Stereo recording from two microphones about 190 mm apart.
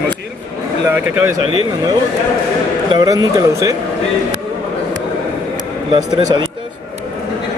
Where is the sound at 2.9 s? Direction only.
20° right (ahead or behind).